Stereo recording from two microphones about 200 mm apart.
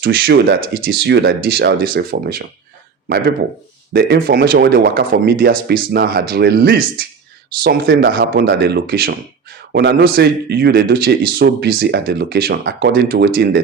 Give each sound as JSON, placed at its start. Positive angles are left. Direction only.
{"t": 0.0, "sound": "speech", "side_deg": -50}
{"t": 3.9, "sound": "speech", "side_deg": -45}